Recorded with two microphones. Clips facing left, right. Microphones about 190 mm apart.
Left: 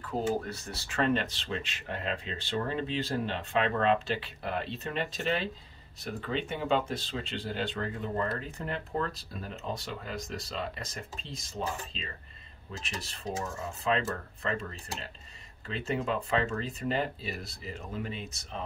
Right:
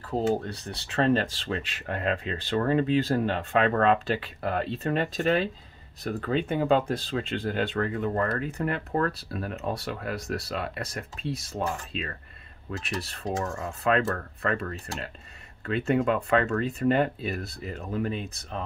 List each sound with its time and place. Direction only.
0.5 s speech: 35° right (ahead or behind)
1.4 s speech: 50° right (ahead or behind)